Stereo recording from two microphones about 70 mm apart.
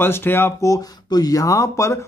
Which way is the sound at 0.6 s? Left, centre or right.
Left.